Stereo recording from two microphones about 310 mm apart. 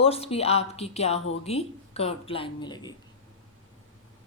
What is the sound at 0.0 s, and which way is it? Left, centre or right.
Speech, centre.